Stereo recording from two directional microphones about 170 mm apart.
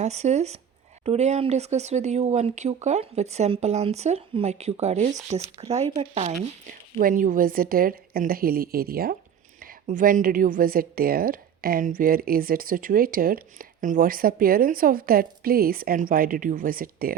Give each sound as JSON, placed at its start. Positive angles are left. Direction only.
{"t": 0.0, "sound": "speech", "side_deg": -40}
{"t": 7.0, "sound": "a woman's voice", "side_deg": -50}